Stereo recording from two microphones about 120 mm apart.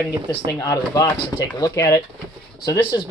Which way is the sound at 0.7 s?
25° left (ahead or behind).